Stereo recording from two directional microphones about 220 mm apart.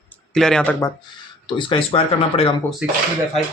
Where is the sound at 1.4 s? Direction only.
20° left (ahead or behind).